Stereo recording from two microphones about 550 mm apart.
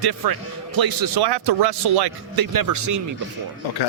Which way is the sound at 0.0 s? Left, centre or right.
Right.